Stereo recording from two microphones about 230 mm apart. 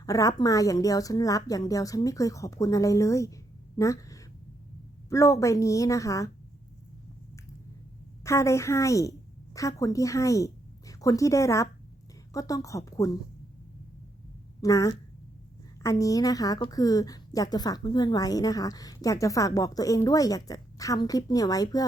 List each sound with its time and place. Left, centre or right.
0.0 s a woman's voice: centre
8.2 s a woman's voice: centre
14.6 s a woman's voice: centre